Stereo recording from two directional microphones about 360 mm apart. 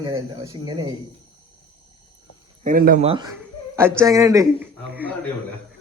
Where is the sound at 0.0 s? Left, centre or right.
Centre.